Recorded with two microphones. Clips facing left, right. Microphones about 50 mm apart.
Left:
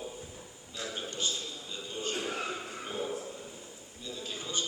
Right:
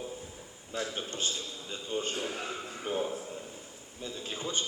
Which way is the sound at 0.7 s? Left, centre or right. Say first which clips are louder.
Right 3 dB; right.